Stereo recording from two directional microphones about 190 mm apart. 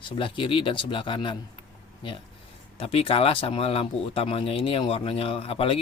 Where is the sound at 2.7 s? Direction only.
30° left (ahead or behind).